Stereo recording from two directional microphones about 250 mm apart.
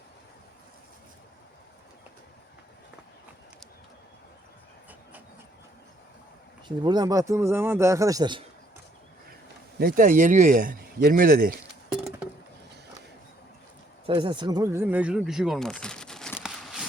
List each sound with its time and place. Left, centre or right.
6.7 s speech: centre
9.7 s speech: right
11.6 s a sound: centre
14.1 s speech: centre